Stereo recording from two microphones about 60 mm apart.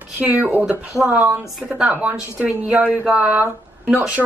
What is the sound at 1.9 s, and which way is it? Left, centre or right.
Speech, right.